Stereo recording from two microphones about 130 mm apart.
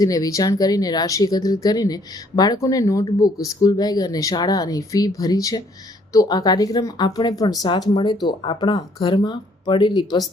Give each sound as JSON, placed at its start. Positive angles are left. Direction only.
{"t": 0.0, "sound": "speech", "side_deg": 25}